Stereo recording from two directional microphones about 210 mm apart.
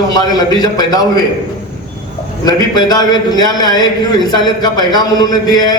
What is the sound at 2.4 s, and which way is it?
A man's voice, 20° left (ahead or behind).